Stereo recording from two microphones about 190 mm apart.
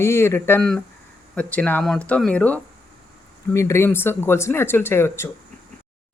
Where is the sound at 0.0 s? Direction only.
15° left (ahead or behind).